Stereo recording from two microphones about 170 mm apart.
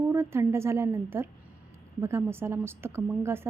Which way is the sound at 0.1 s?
15° right (ahead or behind).